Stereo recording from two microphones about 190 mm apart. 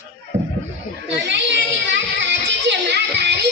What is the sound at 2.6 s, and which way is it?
Music, 60° right (ahead or behind).